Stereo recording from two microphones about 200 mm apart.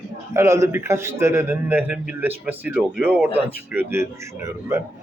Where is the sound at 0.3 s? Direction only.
15° right (ahead or behind).